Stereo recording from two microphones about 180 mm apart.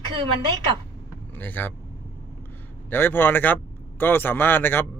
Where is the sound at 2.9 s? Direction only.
10° left (ahead or behind).